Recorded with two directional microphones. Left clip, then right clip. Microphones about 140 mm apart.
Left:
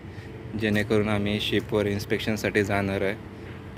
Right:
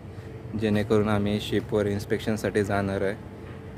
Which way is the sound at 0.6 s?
20° right (ahead or behind).